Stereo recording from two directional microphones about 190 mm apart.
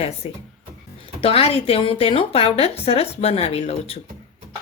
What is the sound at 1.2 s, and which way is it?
Speech, 30° left (ahead or behind).